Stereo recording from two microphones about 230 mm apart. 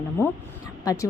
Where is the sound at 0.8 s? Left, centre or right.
Centre.